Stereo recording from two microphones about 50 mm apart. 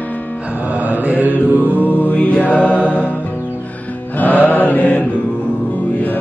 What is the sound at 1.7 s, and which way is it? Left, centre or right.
Mantra, left.